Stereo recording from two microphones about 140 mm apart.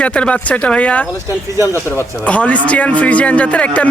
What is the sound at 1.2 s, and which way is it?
Speech, 20° right (ahead or behind).